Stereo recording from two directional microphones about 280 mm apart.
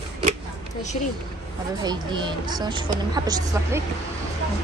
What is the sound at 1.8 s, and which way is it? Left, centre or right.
A woman's voice, centre.